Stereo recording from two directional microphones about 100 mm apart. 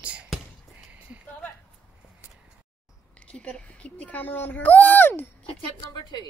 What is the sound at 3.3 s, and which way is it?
Speech, 10° left (ahead or behind).